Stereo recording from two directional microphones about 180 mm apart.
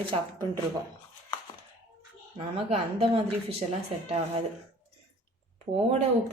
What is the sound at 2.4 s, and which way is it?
A woman's voice, 35° right (ahead or behind).